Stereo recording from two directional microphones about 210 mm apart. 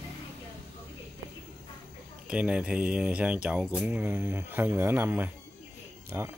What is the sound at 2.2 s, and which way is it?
Speech, 5° right (ahead or behind).